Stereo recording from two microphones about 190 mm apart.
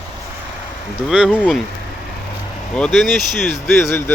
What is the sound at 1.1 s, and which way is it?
Speech, 5° right (ahead or behind).